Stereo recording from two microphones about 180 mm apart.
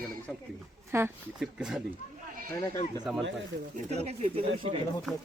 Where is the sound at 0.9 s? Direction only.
15° right (ahead or behind).